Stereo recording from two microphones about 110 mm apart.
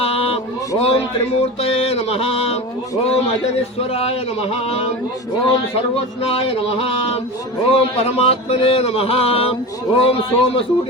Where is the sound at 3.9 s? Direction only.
65° left (ahead or behind).